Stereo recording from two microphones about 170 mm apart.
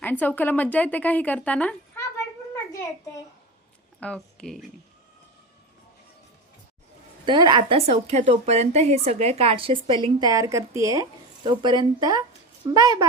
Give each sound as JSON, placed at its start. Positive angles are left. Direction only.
{"t": 0.0, "sound": "a woman's voice", "side_deg": 10}
{"t": 4.0, "sound": "speech", "side_deg": 5}
{"t": 7.3, "sound": "a woman's voice", "side_deg": -25}